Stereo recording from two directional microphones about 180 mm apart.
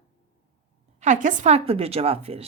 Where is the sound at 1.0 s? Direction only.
45° right (ahead or behind).